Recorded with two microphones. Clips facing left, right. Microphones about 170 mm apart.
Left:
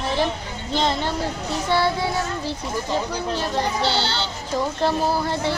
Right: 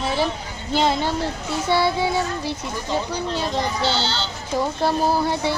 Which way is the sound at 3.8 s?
60° left (ahead or behind).